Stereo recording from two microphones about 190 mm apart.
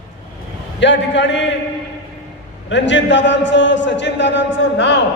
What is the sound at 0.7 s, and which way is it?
Speech, 70° left (ahead or behind).